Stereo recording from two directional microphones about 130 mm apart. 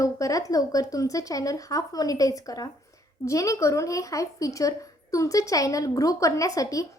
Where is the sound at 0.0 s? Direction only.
25° left (ahead or behind).